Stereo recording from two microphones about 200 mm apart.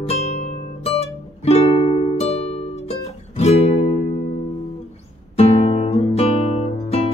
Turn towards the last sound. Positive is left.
turn(degrees=30)  # may be behind; listen again after turning